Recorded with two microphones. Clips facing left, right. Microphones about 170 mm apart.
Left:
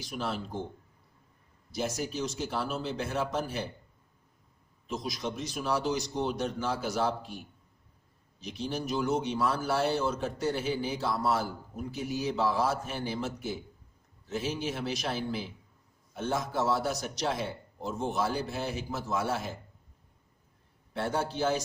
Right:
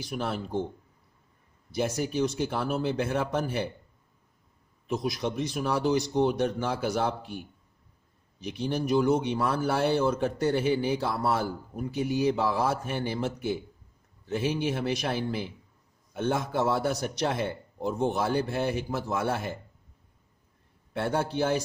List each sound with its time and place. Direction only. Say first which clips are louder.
0.0 s a man's voice: right 3 dB; 55° right (ahead or behind)
1.7 s a man's voice: right 5 dB; 60° right (ahead or behind)
4.9 s a man's voice: right 5 dB; 60° right (ahead or behind)
20.9 s a man's voice: right 3 dB; 60° right (ahead or behind)